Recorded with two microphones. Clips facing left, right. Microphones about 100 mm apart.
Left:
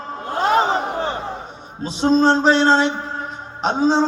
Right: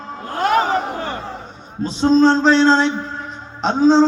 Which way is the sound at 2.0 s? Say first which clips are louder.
Right 2 dB; 15° left (ahead or behind).